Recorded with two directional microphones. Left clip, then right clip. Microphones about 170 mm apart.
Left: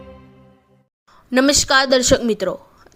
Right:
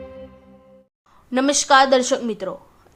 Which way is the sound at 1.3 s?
20° left (ahead or behind).